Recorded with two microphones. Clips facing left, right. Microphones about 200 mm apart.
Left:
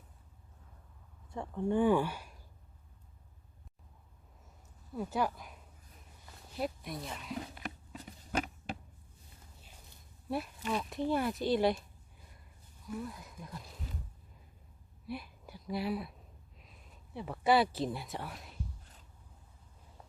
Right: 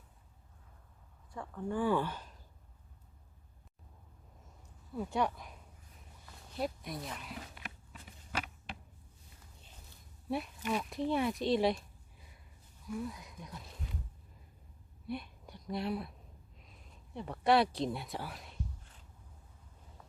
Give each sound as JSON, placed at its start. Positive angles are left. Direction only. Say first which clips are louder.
{"t": 1.3, "sound": "speech", "louder": "left 5 dB", "side_deg": 25}
{"t": 4.9, "sound": "speech", "louder": "even", "side_deg": 5}
{"t": 6.6, "sound": "speech", "louder": "even", "side_deg": 0}
{"t": 7.5, "sound": "a sound", "louder": "left 6 dB", "side_deg": 40}
{"t": 10.2, "sound": "speech", "louder": "even", "side_deg": 0}
{"t": 15.0, "sound": "speech", "louder": "right 1 dB", "side_deg": 5}
{"t": 17.2, "sound": "speech", "louder": "even", "side_deg": 5}